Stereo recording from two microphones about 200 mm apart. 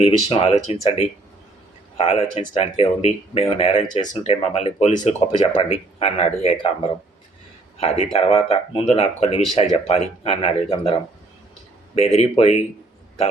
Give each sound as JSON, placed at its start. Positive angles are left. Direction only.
{"t": 0.0, "sound": "speech", "side_deg": 30}
{"t": 2.0, "sound": "speech", "side_deg": 30}
{"t": 7.8, "sound": "speech", "side_deg": 30}
{"t": 11.9, "sound": "speech", "side_deg": 30}